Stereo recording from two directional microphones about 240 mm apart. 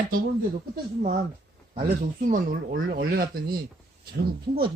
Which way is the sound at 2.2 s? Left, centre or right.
Right.